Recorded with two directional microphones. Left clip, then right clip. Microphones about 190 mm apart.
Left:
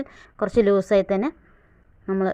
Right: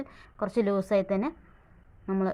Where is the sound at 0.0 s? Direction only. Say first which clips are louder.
Left 7 dB; 25° left (ahead or behind).